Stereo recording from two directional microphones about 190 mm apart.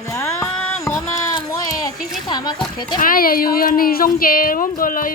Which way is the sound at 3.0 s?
50° left (ahead or behind).